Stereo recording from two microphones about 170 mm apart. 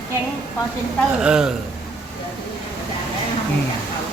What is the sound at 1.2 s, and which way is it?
Speech, 5° right (ahead or behind).